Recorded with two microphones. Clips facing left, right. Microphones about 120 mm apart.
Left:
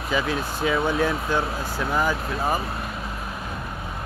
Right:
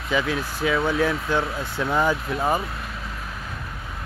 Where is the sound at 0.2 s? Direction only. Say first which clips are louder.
Even; 15° left (ahead or behind).